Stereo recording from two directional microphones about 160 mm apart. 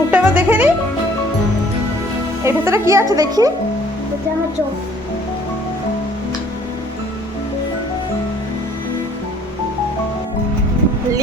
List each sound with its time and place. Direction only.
0.1 s music: 10° right (ahead or behind)
2.4 s speech: 15° right (ahead or behind)